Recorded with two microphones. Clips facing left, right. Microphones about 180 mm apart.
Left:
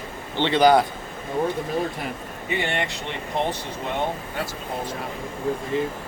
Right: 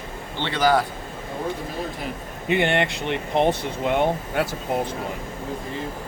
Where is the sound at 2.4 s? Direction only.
60° right (ahead or behind).